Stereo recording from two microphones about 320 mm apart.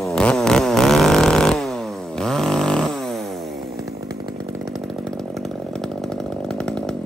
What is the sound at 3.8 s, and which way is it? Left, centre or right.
Chainsaw, centre.